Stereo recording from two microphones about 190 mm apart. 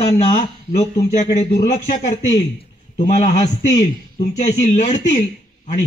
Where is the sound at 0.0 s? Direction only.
35° left (ahead or behind).